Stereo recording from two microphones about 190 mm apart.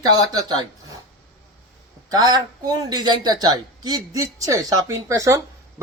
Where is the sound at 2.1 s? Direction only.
20° right (ahead or behind).